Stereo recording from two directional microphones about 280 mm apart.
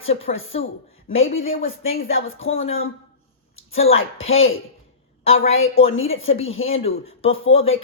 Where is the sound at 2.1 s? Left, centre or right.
Left.